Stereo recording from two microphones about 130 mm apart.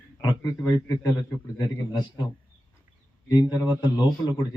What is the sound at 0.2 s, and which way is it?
A man's voice, 25° left (ahead or behind).